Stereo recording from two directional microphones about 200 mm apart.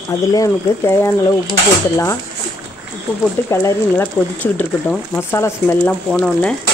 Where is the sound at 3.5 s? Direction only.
15° left (ahead or behind).